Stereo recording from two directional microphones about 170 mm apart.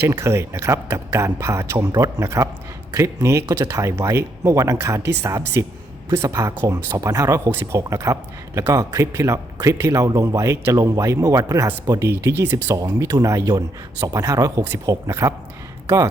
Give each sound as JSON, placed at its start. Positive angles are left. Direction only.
{"t": 0.0, "sound": "speech", "side_deg": -15}